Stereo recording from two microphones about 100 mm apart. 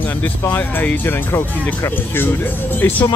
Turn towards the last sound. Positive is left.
turn(degrees=20)  # may be behind; listen again after turning